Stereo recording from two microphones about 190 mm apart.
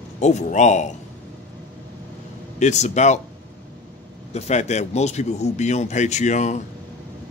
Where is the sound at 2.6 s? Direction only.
40° left (ahead or behind).